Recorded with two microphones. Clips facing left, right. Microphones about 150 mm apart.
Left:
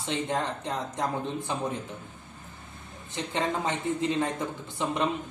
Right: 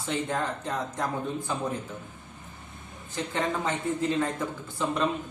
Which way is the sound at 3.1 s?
20° left (ahead or behind).